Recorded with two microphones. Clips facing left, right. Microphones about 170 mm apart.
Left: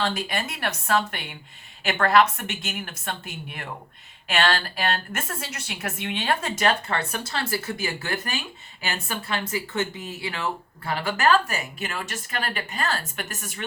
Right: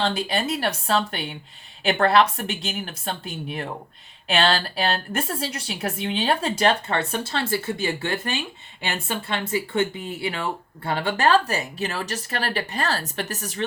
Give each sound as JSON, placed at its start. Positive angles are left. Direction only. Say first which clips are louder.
{"t": 0.0, "sound": "speech", "louder": "right 3 dB", "side_deg": -30}